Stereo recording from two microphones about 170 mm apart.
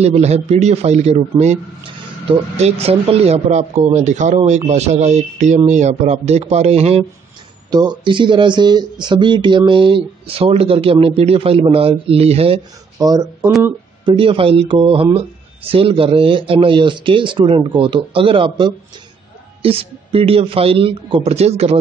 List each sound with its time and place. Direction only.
0.0 s speech: 40° right (ahead or behind)
2.2 s speech: 35° right (ahead or behind)
7.7 s speech: 25° right (ahead or behind)
13.0 s speech: 25° right (ahead or behind); by 21.7 s 40° right (ahead or behind)